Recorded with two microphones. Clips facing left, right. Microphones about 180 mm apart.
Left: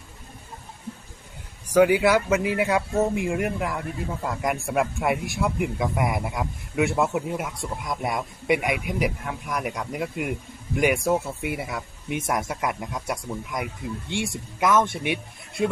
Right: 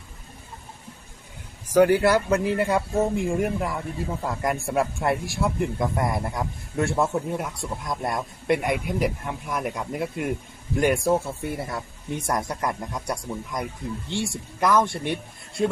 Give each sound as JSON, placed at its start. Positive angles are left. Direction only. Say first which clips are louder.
{"t": 1.7, "sound": "speech", "louder": "even", "side_deg": 0}
{"t": 12.0, "sound": "speech", "louder": "left 3 dB", "side_deg": 20}
{"t": 12.5, "sound": "speech", "louder": "even", "side_deg": 5}
{"t": 14.1, "sound": "speech", "louder": "even", "side_deg": 20}
{"t": 14.6, "sound": "speech", "louder": "even", "side_deg": 0}